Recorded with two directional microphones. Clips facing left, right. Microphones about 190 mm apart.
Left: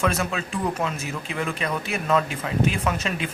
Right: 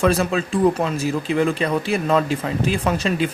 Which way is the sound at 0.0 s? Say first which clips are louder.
Right 6 dB; 30° right (ahead or behind).